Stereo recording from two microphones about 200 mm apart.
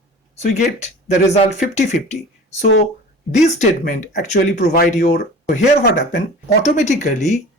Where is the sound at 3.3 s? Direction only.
35° left (ahead or behind).